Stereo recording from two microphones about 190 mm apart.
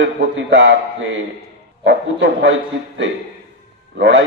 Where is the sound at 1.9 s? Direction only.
80° right.